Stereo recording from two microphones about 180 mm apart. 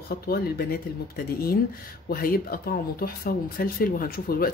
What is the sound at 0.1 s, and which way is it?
Speech, 55° left (ahead or behind).